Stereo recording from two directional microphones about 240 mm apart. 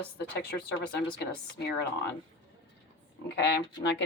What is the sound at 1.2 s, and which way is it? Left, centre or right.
Speech, left.